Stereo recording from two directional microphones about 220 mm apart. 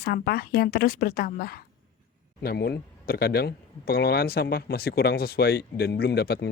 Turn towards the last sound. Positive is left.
turn(degrees=45)  # may be behind; listen again after turning